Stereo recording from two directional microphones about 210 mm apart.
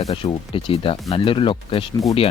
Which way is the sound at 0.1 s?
25° left (ahead or behind).